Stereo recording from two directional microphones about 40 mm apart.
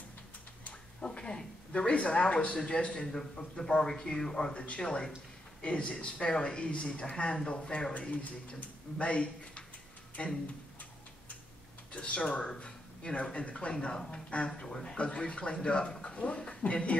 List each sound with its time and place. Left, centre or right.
1.0 s speech: left
4.6 s speech: left
8.0 s speech: left
11.9 s speech: left
14.6 s a man's voice: centre
15.0 s speech: left